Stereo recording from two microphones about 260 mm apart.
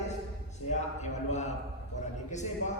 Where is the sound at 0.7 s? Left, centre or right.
Left.